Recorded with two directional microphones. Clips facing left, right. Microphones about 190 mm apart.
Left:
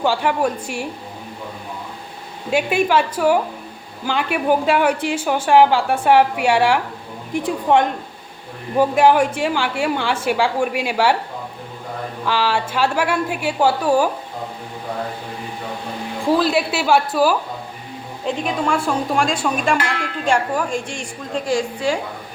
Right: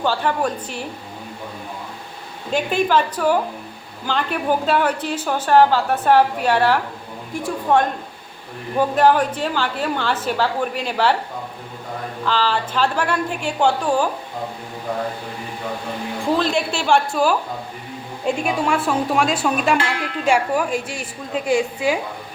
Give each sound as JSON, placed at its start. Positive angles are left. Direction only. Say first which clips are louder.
{"t": 0.0, "sound": "a woman's voice", "louder": "left 2 dB", "side_deg": 10}
{"t": 2.5, "sound": "a woman's voice", "louder": "left 1 dB", "side_deg": 10}
{"t": 12.2, "sound": "a woman's voice", "louder": "left 1 dB", "side_deg": 10}
{"t": 16.2, "sound": "speech", "louder": "left 3 dB", "side_deg": 5}
{"t": 18.3, "sound": "a woman's voice", "louder": "right 1 dB", "side_deg": -5}